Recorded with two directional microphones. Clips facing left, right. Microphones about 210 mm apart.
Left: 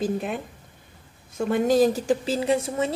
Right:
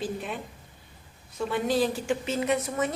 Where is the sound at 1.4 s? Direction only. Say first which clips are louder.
Left 6 dB; 45° left (ahead or behind); by 2.9 s 30° left (ahead or behind).